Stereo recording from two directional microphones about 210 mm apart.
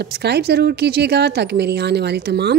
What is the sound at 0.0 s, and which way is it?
Speech, 50° right (ahead or behind).